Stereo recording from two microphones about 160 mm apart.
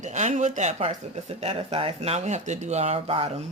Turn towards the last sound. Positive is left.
turn(degrees=-40)  # may be behind; listen again after turning